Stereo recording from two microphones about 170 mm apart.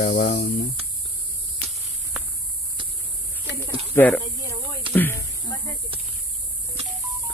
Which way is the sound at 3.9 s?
10° left (ahead or behind).